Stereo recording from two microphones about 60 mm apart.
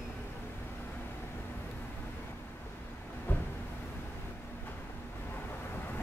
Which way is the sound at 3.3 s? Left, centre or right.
Left.